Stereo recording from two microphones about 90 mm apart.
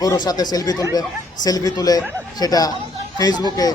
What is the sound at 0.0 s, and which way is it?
A man's voice, 45° left (ahead or behind).